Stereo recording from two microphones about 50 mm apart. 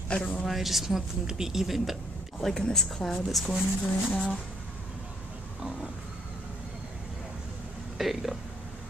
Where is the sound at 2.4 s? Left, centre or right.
Centre.